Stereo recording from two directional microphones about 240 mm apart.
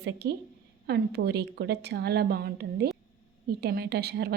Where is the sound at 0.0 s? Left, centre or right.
Right.